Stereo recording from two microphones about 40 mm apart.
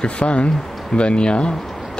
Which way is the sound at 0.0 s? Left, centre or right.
Left.